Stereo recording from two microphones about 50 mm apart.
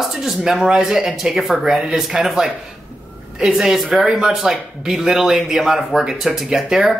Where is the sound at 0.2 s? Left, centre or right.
Centre.